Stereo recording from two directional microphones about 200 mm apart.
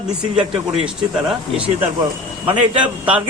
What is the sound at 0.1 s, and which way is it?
A woman's voice, 5° right (ahead or behind).